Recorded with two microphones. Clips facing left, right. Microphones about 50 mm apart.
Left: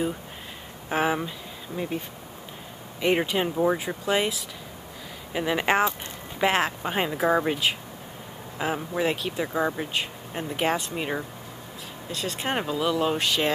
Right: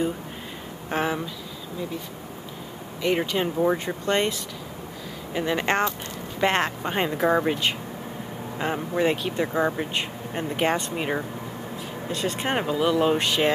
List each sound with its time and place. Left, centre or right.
0.8 s speech: centre
1.8 s speech: left
3.0 s speech: centre